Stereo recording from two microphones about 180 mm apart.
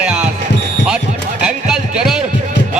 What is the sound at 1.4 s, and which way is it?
Speech, 5° right (ahead or behind).